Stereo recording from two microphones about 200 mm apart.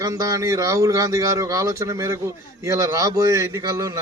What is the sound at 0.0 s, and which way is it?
A man's voice, 15° right (ahead or behind).